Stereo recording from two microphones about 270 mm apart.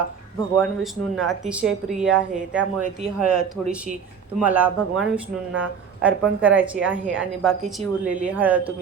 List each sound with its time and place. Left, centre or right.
0.5 s a woman's voice: centre